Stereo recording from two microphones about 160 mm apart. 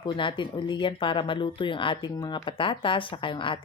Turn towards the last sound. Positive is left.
turn(degrees=30)  # may be behind; listen again after turning